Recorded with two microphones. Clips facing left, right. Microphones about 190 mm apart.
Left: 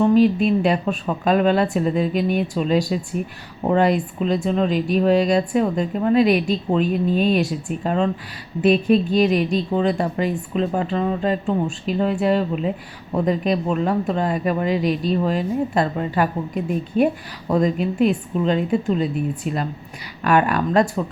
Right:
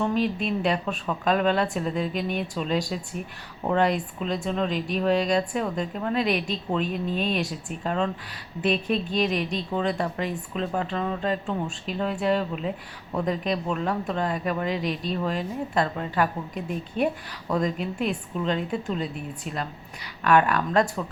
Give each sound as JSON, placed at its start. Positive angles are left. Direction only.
{"t": 0.0, "sound": "a woman's voice", "side_deg": 5}
{"t": 21.0, "sound": "speech", "side_deg": 25}